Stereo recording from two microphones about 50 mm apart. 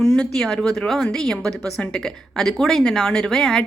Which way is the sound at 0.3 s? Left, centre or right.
Centre.